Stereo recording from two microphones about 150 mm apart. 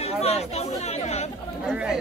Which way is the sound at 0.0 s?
45° left (ahead or behind).